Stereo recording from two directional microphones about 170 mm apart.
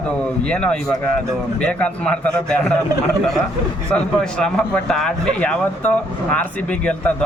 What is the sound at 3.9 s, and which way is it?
Speech, 5° left (ahead or behind).